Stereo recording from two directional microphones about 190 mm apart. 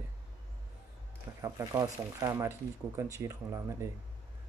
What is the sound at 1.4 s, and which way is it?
Speech, 15° right (ahead or behind).